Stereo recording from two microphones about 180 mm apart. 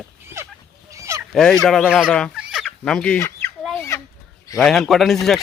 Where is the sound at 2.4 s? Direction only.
5° right (ahead or behind); by 3.5 s 15° left (ahead or behind).